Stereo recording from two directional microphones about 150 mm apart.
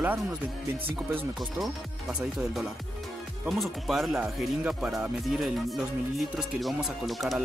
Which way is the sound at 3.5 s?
Centre (ahead or behind).